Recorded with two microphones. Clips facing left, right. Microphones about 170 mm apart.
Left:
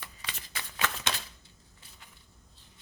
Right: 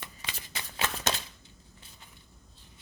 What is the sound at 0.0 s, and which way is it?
Shuffling cards, 20° right (ahead or behind).